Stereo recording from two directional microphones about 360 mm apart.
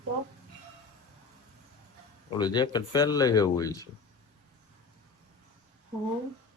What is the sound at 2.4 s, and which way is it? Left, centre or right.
Speech, centre.